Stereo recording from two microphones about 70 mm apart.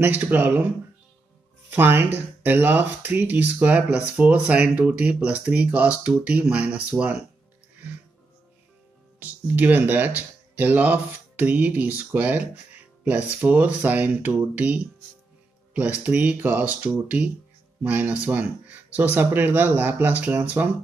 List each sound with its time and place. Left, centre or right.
0.0 s speech: right
1.7 s speech: right
9.2 s speech: right